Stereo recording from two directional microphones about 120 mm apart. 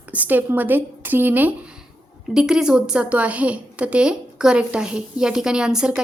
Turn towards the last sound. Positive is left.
turn(degrees=-5)  # may be behind; listen again after turning